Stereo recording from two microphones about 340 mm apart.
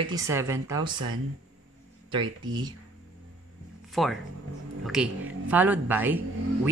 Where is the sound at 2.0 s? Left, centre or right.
Centre.